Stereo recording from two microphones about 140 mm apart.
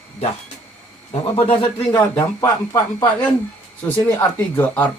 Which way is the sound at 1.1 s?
40° left (ahead or behind).